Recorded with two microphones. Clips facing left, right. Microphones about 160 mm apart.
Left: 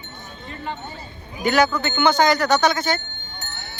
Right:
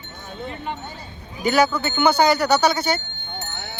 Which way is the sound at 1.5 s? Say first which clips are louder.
Even; 5° right (ahead or behind).